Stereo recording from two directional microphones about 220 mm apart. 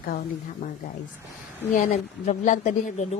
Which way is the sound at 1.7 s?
35° left (ahead or behind).